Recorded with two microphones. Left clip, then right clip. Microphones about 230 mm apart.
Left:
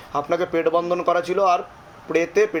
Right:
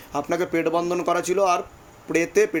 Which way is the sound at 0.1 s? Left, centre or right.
Right.